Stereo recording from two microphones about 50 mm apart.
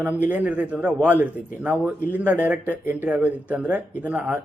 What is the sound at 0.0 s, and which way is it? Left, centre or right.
A man's voice, right.